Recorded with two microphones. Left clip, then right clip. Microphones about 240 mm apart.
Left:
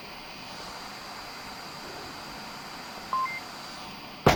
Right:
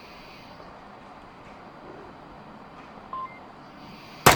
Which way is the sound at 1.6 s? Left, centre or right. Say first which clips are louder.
Left 4 dB; left.